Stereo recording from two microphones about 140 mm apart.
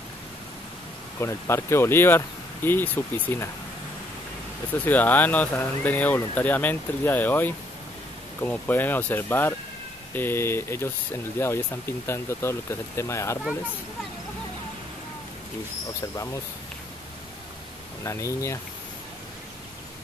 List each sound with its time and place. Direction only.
1.2 s speech: 20° left (ahead or behind)
4.8 s speech: 10° left (ahead or behind)
18.0 s speech: 20° left (ahead or behind)